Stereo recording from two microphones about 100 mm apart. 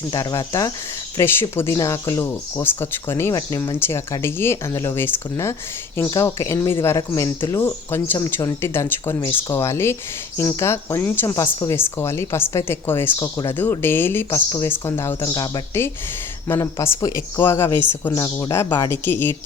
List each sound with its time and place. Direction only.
0.1 s speech: 40° left (ahead or behind)
1.2 s speech: 25° left (ahead or behind)
8.2 s speech: 35° left (ahead or behind)
13.1 s speech: 35° left (ahead or behind)
13.5 s speech: 20° left (ahead or behind)
15.2 s speech: 40° left (ahead or behind)
16.5 s speech: 30° left (ahead or behind)